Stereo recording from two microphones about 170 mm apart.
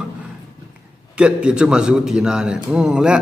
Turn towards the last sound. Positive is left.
turn(degrees=-5)  # may be behind; listen again after turning